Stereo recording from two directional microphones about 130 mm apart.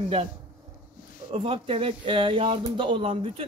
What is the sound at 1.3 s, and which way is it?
Speech, 45° right (ahead or behind).